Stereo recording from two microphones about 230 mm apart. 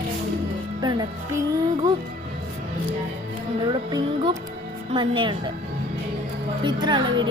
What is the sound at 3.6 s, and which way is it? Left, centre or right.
Speech, centre.